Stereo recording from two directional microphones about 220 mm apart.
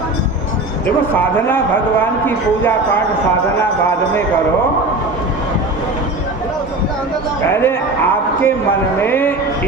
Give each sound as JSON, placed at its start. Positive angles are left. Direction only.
{"t": 1.1, "sound": "speech", "side_deg": 10}
{"t": 7.4, "sound": "speech", "side_deg": 10}